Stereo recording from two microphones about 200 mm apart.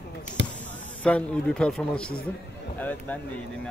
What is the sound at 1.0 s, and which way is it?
Speech, 5° left (ahead or behind).